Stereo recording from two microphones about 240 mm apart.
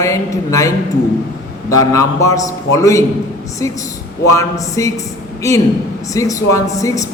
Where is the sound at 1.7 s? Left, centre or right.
Centre.